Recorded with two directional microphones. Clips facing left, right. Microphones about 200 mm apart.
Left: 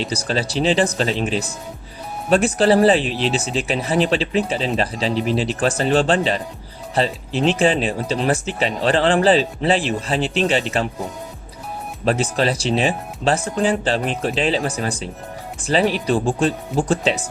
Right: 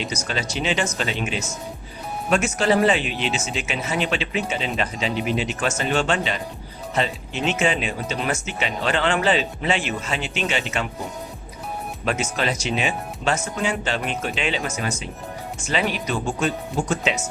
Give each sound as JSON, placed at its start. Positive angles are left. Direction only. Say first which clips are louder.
{"t": 0.0, "sound": "speech", "louder": "left 5 dB", "side_deg": 35}
{"t": 12.0, "sound": "speech", "louder": "left 6 dB", "side_deg": 35}